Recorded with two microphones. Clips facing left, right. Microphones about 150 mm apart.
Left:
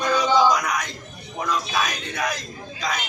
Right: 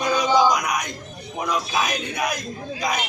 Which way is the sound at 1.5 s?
10° right (ahead or behind).